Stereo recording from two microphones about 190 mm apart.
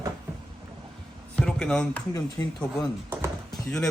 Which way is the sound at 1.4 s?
5° left (ahead or behind).